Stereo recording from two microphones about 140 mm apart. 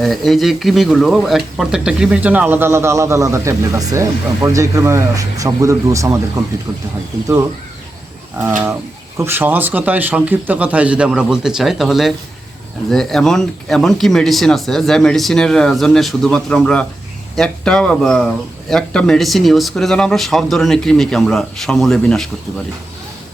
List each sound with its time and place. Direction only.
0.0 s speech: centre (ahead or behind); by 6.8 s 25° right (ahead or behind)
8.4 s speech: 15° right (ahead or behind); by 22.6 s 5° left (ahead or behind)